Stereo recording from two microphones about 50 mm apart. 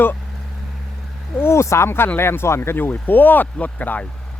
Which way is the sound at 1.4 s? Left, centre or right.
Left.